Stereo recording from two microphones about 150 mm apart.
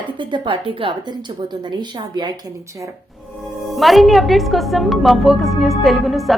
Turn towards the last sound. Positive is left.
turn(degrees=0)  # may be behind; listen again after turning